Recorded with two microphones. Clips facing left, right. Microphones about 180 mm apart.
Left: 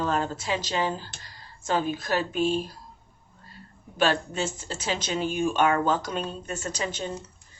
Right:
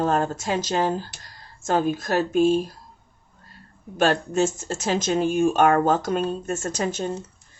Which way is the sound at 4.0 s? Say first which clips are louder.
Right 5 dB; 45° right (ahead or behind).